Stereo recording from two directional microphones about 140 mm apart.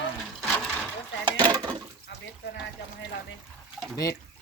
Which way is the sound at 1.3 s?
30° right (ahead or behind).